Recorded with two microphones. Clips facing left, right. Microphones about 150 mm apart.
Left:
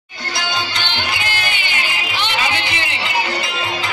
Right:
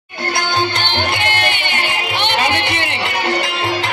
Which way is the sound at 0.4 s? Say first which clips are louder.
Right 4 dB; 55° right (ahead or behind).